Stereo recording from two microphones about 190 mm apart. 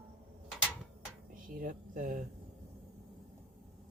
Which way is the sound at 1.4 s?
45° right (ahead or behind).